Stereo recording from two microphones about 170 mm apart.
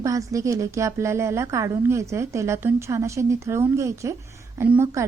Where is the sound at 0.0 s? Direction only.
20° right (ahead or behind).